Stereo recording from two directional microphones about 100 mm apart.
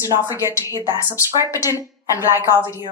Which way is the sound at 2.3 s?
30° left (ahead or behind).